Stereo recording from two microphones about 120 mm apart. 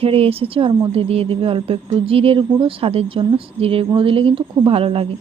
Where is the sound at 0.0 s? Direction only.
55° right (ahead or behind).